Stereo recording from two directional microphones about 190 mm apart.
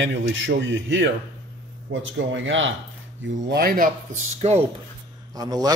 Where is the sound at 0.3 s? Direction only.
70° right (ahead or behind).